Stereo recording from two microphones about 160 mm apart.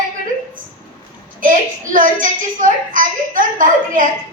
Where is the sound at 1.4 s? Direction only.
55° right (ahead or behind).